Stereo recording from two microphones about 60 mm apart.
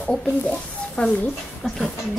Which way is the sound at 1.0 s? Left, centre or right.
Left.